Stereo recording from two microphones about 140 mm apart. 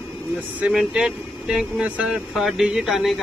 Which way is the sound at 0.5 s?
5° right (ahead or behind).